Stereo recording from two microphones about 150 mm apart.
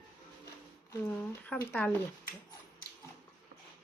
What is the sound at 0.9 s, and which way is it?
Speech, 10° left (ahead or behind).